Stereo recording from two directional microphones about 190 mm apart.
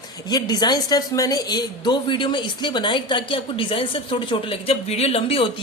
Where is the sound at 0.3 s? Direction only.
20° left (ahead or behind).